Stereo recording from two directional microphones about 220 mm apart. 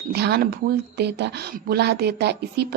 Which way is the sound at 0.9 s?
50° right (ahead or behind).